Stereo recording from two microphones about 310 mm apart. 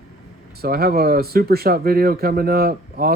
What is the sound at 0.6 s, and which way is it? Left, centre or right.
Speech, right.